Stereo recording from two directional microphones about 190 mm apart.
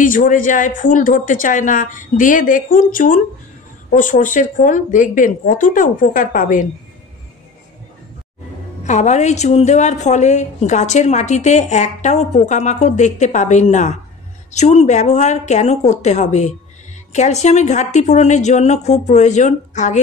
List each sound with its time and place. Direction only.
0.0 s speech: 45° left (ahead or behind)
8.8 s a woman's voice: 40° left (ahead or behind)